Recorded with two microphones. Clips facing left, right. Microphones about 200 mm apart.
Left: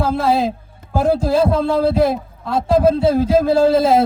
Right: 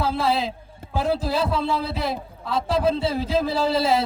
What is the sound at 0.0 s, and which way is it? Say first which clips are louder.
A man's voice: left 6 dB; 50° left (ahead or behind).